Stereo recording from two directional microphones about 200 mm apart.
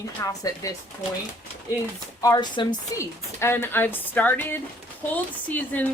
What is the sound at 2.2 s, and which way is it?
A woman's voice, 20° left (ahead or behind).